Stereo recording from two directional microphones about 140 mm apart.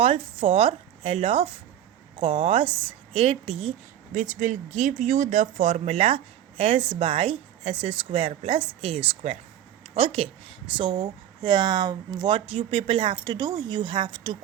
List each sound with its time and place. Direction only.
0.0 s speech: 40° right (ahead or behind)
4.1 s speech: 60° right (ahead or behind); by 12.4 s 30° right (ahead or behind)
12.5 s speech: 40° right (ahead or behind)